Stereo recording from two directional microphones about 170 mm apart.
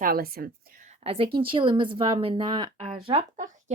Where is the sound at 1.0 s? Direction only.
35° right (ahead or behind).